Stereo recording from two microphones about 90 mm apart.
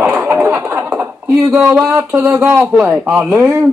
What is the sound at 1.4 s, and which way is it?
Speech, 30° right (ahead or behind).